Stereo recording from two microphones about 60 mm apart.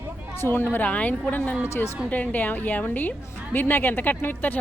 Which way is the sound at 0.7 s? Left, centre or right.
Left.